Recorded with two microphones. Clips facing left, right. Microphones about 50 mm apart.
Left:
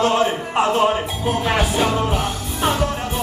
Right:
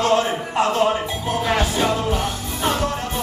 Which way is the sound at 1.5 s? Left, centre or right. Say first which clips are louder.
Even; centre.